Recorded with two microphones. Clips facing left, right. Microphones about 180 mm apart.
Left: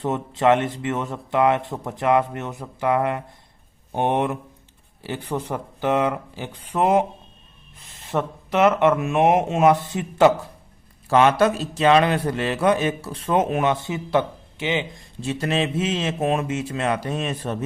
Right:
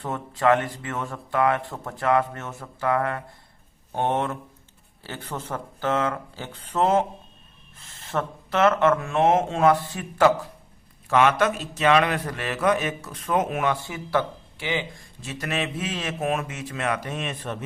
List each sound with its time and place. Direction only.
0.0 s a man's voice: 20° left (ahead or behind)
11.1 s a man's voice: 35° left (ahead or behind)